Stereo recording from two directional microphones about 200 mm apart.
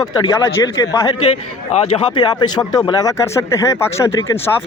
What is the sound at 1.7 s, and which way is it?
Speech, 30° left (ahead or behind).